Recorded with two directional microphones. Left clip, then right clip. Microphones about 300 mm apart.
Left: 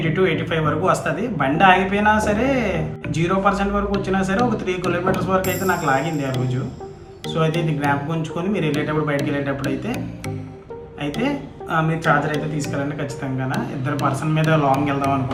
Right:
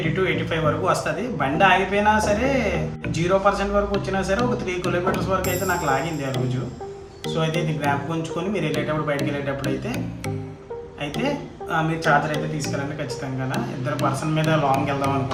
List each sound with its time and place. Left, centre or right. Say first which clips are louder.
0.2 s speech: left 3 dB; centre
11.7 s speech: left 1 dB; centre